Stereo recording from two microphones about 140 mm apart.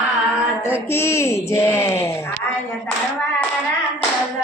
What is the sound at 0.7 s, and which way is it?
Speech, 20° left (ahead or behind).